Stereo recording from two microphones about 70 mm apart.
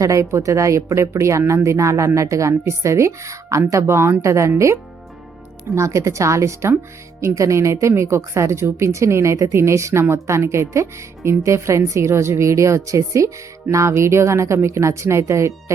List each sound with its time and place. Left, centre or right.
0.0 s speech: right